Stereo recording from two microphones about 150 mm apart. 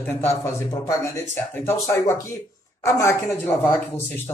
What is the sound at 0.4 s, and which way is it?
Speech, 20° left (ahead or behind).